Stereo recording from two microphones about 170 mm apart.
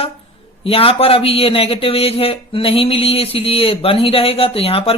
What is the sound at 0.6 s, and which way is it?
A man's voice, 35° left (ahead or behind).